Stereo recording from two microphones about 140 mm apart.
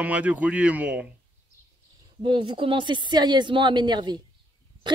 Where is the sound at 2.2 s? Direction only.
35° right (ahead or behind).